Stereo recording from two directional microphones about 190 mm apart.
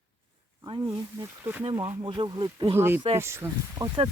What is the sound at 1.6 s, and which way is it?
Speech, 20° right (ahead or behind).